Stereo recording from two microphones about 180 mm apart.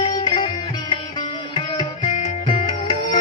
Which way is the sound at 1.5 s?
25° left (ahead or behind).